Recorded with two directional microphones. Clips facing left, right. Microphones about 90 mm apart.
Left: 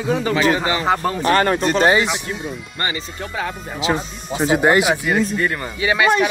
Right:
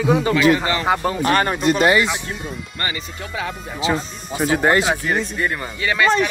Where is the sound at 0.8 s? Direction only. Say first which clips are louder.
Left 1 dB; 10° right (ahead or behind).